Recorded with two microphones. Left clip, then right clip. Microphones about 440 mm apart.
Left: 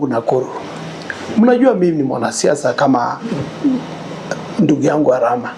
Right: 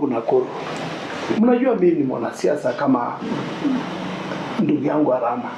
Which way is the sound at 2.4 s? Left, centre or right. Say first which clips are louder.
Left 6 dB; left.